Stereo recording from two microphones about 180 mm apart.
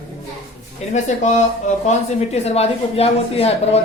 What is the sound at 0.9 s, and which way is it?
Speech, 40° left (ahead or behind).